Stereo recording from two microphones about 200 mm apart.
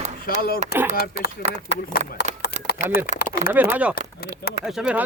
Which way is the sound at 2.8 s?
35° right (ahead or behind).